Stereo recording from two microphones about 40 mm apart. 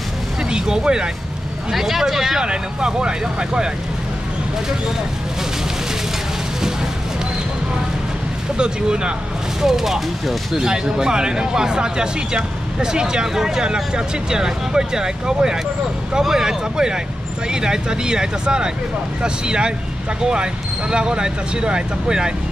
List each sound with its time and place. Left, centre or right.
0.5 s speech: centre
1.7 s speech: centre
2.4 s speech: right
8.5 s speech: right
9.6 s speech: centre
20.9 s speech: right